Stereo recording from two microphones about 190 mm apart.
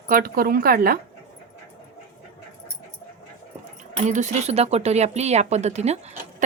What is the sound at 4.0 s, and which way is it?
Speech, 40° right (ahead or behind).